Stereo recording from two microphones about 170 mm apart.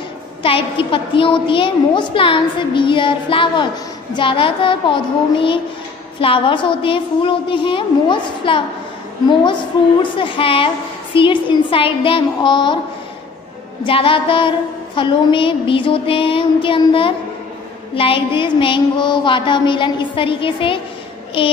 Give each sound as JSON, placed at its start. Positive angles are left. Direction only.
{"t": 0.4, "sound": "a woman's voice", "side_deg": 30}
{"t": 10.1, "sound": "a woman's voice", "side_deg": 30}
{"t": 13.8, "sound": "a woman's voice", "side_deg": 30}